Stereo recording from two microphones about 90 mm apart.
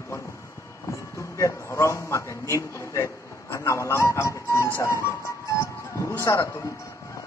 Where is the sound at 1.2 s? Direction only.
35° left (ahead or behind).